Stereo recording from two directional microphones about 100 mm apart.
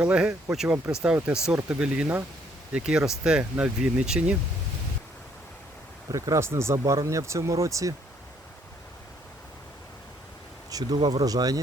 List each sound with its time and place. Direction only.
0.0 s speech: 10° right (ahead or behind)
6.1 s speech: 35° right (ahead or behind)
10.7 s speech: 45° right (ahead or behind)